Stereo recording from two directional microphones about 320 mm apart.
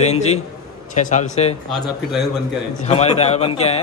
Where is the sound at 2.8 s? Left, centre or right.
Left.